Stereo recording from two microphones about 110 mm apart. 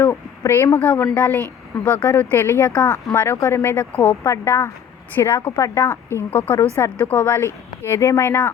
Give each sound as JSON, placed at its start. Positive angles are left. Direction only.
{"t": 0.0, "sound": "a woman's voice", "side_deg": 20}
{"t": 0.8, "sound": "a woman's voice", "side_deg": 15}